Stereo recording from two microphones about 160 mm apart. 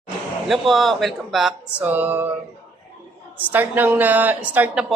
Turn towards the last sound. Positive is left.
turn(degrees=-10)  # may be behind; listen again after turning